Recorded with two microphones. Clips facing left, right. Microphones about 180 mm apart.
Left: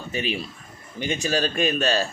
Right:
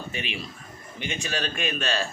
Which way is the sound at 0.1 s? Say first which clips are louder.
Left 6 dB; 40° left (ahead or behind).